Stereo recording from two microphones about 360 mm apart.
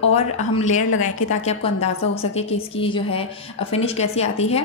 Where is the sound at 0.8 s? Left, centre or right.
Left.